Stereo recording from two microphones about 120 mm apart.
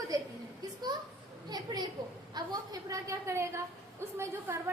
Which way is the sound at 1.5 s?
35° right (ahead or behind).